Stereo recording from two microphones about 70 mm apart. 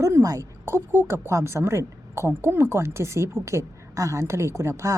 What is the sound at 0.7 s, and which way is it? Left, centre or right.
A woman's voice, right.